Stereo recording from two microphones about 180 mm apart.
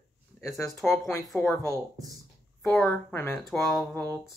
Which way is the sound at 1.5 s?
15° left (ahead or behind).